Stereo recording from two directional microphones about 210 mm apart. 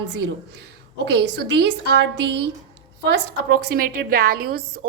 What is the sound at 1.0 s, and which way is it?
A woman's voice, 55° right (ahead or behind).